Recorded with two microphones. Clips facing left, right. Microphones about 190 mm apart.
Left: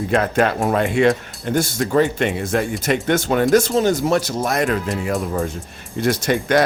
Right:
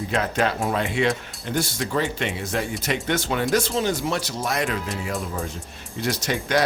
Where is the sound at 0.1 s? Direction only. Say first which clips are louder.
Left 6 dB; 55° left (ahead or behind).